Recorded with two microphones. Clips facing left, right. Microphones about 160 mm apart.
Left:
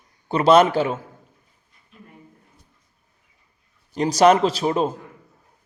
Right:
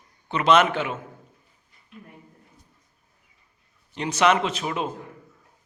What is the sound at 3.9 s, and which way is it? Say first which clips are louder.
A man's voice: left 6 dB; 35° left (ahead or behind).